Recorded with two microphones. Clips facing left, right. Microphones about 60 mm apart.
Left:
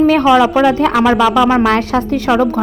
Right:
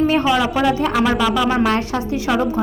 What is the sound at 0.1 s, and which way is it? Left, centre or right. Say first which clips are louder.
Speech: left 7 dB; left.